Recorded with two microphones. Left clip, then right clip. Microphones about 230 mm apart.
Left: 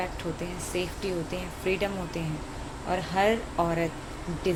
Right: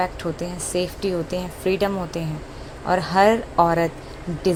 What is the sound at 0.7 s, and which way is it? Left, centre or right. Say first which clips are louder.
Speech: right 8 dB; right.